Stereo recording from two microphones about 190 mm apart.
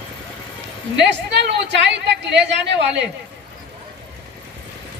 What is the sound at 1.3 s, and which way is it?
Speech, 65° right (ahead or behind).